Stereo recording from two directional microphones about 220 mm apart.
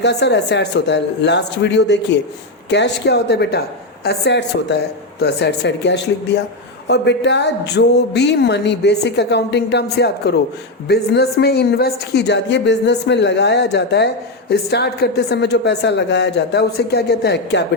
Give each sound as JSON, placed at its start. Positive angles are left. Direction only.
{"t": 0.0, "sound": "a woman's voice", "side_deg": 50}